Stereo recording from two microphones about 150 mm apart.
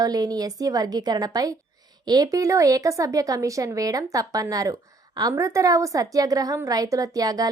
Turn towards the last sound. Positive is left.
turn(degrees=-25)  # may be behind; listen again after turning